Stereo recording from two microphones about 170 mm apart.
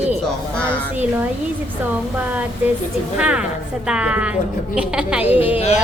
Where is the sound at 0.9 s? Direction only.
10° right (ahead or behind).